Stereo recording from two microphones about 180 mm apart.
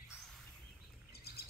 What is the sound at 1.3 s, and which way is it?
Bird, 60° left (ahead or behind).